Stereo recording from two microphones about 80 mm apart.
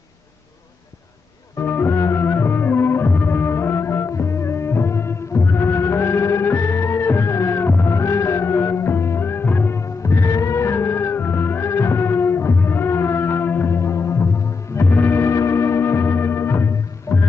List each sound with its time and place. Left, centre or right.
1.6 s music: left
17.1 s music: left